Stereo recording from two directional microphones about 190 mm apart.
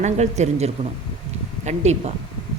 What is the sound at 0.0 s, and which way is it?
Speech, 35° right (ahead or behind).